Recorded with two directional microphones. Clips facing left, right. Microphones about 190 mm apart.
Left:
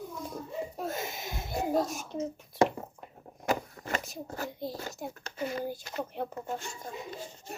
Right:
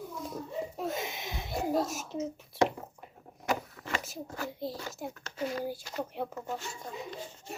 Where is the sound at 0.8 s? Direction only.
Centre (ahead or behind).